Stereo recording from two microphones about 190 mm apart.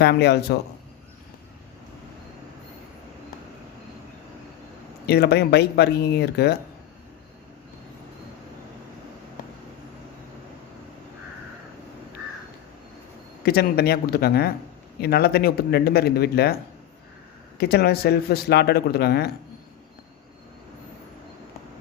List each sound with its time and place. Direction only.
0.0 s speech: 60° left (ahead or behind)
5.0 s speech: 60° left (ahead or behind)
13.4 s speech: 55° left (ahead or behind)
17.6 s speech: 55° left (ahead or behind)